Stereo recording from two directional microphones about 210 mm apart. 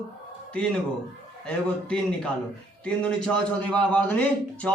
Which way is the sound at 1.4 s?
5° left (ahead or behind).